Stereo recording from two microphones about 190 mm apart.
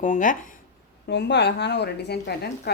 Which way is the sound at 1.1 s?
65° left (ahead or behind).